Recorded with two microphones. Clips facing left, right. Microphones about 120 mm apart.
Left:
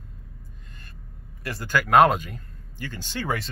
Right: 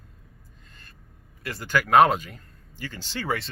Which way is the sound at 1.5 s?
20° right (ahead or behind).